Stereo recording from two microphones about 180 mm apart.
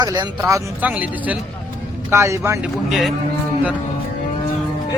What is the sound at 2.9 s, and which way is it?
Speech, centre (ahead or behind).